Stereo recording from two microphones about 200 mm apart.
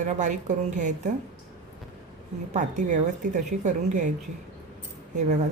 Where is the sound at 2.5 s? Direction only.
40° right (ahead or behind).